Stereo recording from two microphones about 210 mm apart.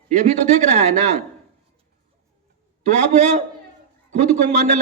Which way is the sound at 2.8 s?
35° right (ahead or behind).